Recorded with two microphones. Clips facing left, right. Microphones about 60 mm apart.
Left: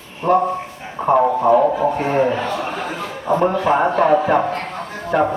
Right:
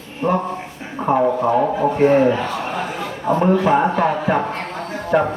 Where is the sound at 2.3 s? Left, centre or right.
Centre.